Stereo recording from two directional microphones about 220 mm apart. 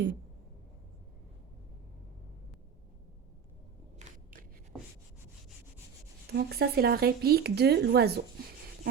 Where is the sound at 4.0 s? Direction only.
30° right (ahead or behind).